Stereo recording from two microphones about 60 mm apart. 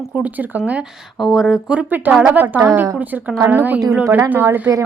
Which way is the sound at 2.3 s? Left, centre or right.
Right.